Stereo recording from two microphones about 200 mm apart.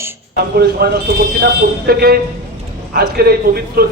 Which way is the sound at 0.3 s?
50° right (ahead or behind).